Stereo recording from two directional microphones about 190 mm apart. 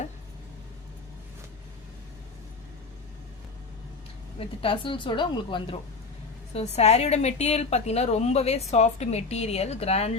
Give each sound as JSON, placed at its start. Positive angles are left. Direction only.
{"t": 4.4, "sound": "a woman's voice", "side_deg": 30}